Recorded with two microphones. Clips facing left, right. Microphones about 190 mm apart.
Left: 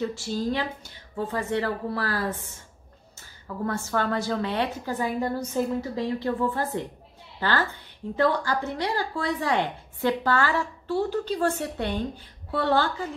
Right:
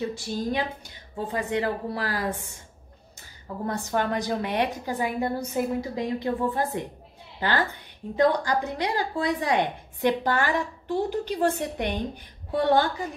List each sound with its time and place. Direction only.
0.0 s a woman's voice: 15° right (ahead or behind)
3.6 s a woman's voice: 15° right (ahead or behind)